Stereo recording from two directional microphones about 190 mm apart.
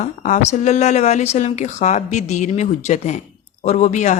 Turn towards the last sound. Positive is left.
turn(degrees=40)  # may be behind; listen again after turning